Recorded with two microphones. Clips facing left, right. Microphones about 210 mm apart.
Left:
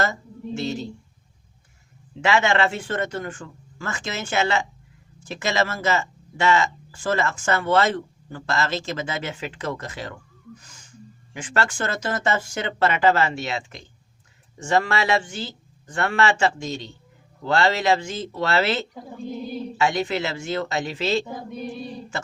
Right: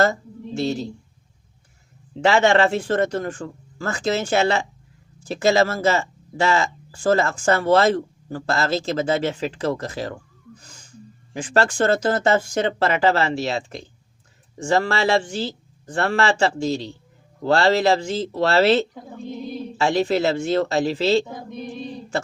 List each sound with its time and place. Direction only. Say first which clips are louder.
0.0 s speech: right 6 dB; 35° right (ahead or behind)
2.2 s speech: right 4 dB; 35° right (ahead or behind)
10.6 s gasp: right 3 dB; 35° right (ahead or behind)
11.3 s speech: right 6 dB; 35° right (ahead or behind)